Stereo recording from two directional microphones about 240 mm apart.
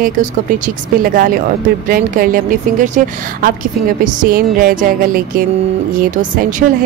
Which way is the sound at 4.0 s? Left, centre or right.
Right.